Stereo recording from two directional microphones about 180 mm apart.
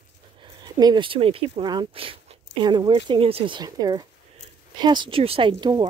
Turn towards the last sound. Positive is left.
turn(degrees=-25)  # may be behind; listen again after turning